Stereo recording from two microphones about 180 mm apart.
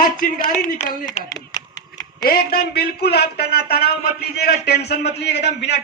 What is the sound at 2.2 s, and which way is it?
A man's voice, 55° left (ahead or behind).